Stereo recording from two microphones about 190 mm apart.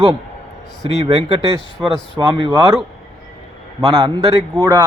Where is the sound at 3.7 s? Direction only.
20° right (ahead or behind).